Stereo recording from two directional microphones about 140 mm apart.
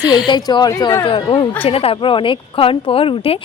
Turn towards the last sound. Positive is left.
turn(degrees=40)  # may be behind; listen again after turning